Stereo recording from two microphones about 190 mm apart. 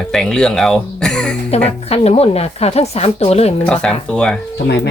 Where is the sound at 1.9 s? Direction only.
30° left (ahead or behind).